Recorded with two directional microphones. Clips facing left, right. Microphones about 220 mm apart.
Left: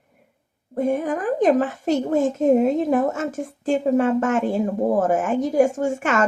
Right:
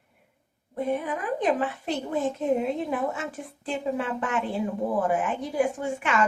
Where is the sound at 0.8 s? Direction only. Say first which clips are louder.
Left 6 dB; 45° left (ahead or behind).